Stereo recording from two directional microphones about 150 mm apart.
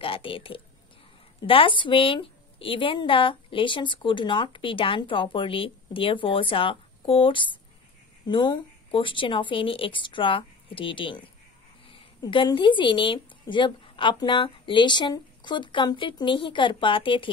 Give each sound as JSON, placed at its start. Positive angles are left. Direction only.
{"t": 0.0, "sound": "a woman's voice", "side_deg": 35}